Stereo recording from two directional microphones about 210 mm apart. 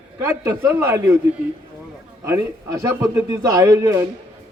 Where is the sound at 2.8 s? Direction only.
15° right (ahead or behind).